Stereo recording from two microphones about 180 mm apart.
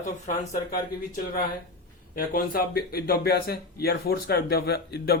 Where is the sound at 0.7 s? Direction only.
55° left (ahead or behind).